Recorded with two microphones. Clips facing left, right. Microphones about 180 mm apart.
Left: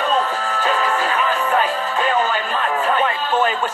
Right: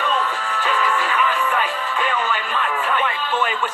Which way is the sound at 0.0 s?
40° left (ahead or behind).